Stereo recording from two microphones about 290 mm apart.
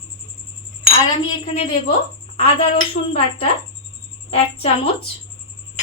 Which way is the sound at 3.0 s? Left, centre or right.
Left.